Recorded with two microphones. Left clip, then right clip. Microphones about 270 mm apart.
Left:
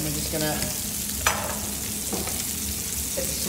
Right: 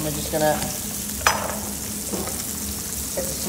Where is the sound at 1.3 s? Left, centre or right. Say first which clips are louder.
Right 5 dB; centre.